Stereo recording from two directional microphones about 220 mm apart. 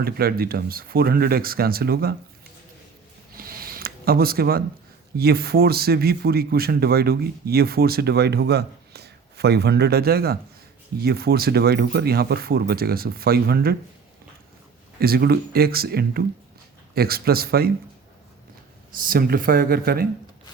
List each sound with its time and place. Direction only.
0.0 s speech: 45° right (ahead or behind)
3.3 s a sound: 40° right (ahead or behind)
5.1 s speech: 45° right (ahead or behind)
14.9 s speech: 45° right (ahead or behind)
19.0 s speech: 40° right (ahead or behind)